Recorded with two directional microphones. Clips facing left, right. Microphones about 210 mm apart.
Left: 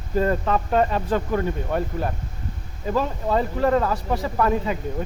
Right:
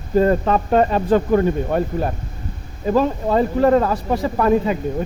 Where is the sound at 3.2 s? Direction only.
35° right (ahead or behind).